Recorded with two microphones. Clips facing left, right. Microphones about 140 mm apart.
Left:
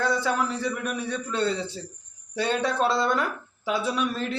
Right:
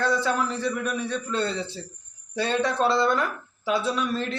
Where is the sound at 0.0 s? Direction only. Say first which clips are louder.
Right 1 dB; 10° left (ahead or behind).